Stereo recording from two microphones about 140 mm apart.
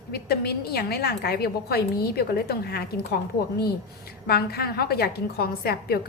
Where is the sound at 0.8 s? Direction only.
90° left.